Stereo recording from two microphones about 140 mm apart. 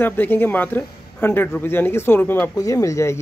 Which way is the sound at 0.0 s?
15° left (ahead or behind).